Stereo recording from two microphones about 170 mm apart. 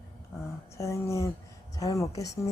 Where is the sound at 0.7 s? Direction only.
15° left (ahead or behind).